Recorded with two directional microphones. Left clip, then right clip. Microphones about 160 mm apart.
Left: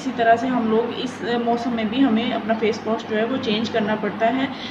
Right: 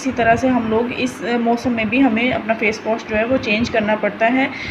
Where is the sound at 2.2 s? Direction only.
30° right (ahead or behind).